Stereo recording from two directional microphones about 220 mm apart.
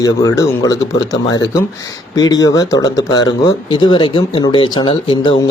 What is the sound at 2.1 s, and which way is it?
Speech, 15° left (ahead or behind).